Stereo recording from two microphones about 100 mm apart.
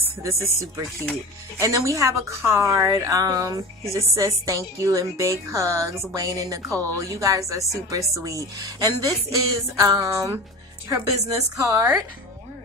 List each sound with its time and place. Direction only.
0.2 s speech: 30° right (ahead or behind)